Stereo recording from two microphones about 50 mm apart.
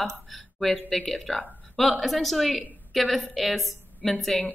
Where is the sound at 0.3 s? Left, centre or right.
Centre.